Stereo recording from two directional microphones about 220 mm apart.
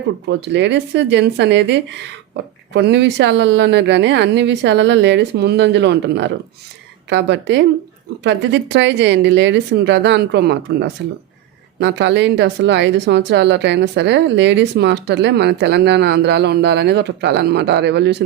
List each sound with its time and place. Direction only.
0.3 s speech: 55° right (ahead or behind)